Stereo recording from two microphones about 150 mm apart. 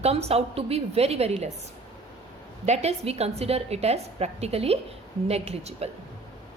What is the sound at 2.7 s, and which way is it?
A woman's voice, 45° right (ahead or behind).